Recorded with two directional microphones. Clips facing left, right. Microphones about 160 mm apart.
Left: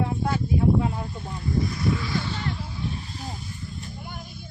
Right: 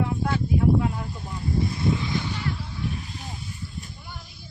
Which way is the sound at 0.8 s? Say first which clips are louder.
Even; 30° left (ahead or behind).